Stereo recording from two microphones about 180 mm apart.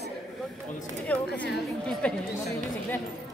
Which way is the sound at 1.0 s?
10° left (ahead or behind).